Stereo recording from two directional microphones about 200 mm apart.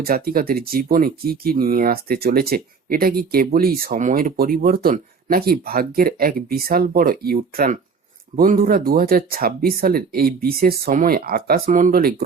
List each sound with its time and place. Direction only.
0.0 s speech: 50° right (ahead or behind)